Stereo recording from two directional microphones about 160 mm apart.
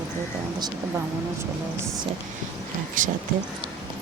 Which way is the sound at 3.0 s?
55° right (ahead or behind).